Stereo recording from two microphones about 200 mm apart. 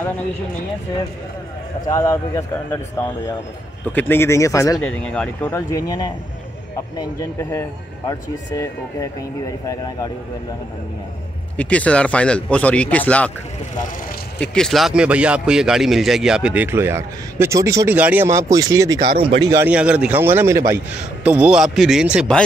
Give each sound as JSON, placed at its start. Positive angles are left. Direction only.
{"t": 1.9, "sound": "speech", "side_deg": 15}
{"t": 3.8, "sound": "speech", "side_deg": 10}
{"t": 4.7, "sound": "a man's voice", "side_deg": 5}
{"t": 7.0, "sound": "speech", "side_deg": 15}
{"t": 11.5, "sound": "speech", "side_deg": 5}
{"t": 14.4, "sound": "speech", "side_deg": 5}
{"t": 19.4, "sound": "a man's voice", "side_deg": -15}